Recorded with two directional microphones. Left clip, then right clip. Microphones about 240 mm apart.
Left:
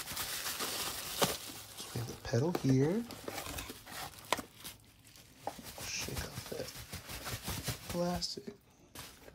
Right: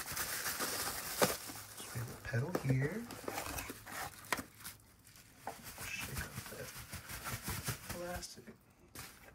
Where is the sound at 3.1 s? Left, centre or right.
Centre.